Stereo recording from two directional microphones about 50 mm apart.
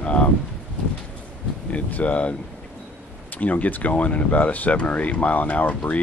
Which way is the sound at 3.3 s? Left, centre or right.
Left.